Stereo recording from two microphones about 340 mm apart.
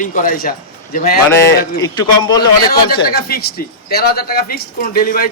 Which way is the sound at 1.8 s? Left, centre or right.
Centre.